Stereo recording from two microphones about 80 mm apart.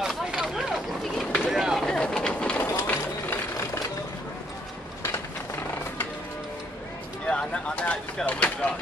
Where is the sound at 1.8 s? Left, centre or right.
Centre.